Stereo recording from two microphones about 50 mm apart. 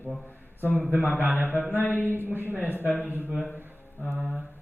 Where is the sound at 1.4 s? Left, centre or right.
Left.